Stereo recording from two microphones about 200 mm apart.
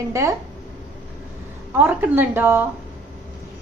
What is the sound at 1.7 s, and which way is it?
Speech, 10° right (ahead or behind).